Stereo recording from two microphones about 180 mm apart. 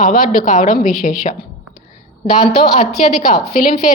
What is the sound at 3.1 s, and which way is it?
Speech, 50° left (ahead or behind).